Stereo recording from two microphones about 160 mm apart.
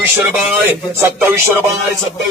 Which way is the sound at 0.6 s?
15° right (ahead or behind).